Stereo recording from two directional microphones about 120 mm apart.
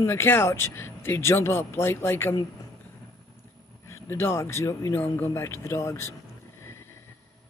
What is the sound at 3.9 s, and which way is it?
A woman's voice, 20° left (ahead or behind).